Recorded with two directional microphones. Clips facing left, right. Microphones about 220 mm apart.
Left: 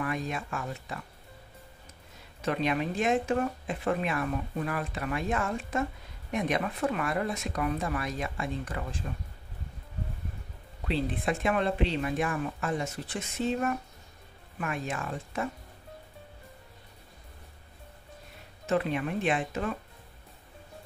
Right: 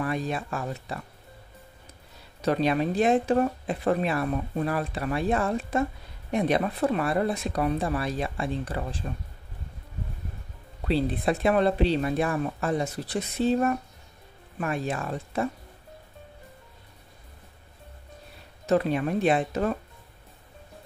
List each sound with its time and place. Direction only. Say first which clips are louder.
0.0 s speech: right 4 dB; 35° right (ahead or behind)
2.4 s speech: right 5 dB; 35° right (ahead or behind)
10.9 s speech: right 5 dB; 35° right (ahead or behind)
18.7 s speech: right 5 dB; 40° right (ahead or behind)